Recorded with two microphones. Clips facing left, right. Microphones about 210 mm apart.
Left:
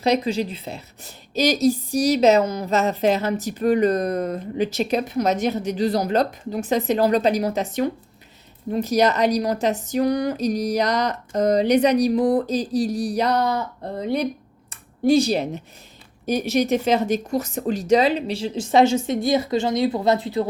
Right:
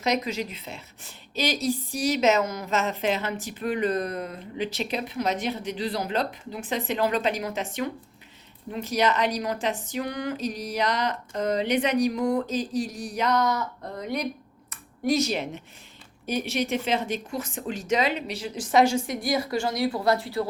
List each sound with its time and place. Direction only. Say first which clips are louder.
0.0 s a woman's voice: left 6 dB; 30° left (ahead or behind)